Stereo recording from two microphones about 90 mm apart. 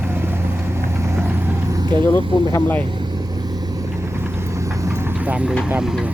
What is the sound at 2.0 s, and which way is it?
Speech, 25° left (ahead or behind).